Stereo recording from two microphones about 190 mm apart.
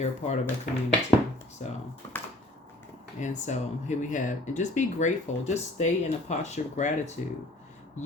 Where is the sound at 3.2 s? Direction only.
40° left (ahead or behind).